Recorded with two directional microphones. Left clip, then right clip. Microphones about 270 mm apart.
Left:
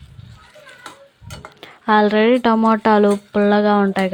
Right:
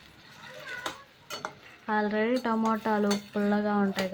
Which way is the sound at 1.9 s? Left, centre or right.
Left.